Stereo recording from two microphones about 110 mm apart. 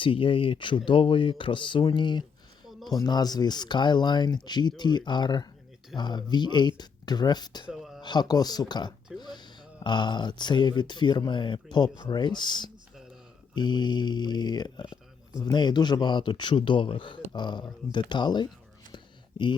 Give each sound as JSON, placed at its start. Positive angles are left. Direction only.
{"t": 0.0, "sound": "a man's voice", "side_deg": 50}
{"t": 7.7, "sound": "a sound", "side_deg": 0}
{"t": 8.0, "sound": "a man's voice", "side_deg": 40}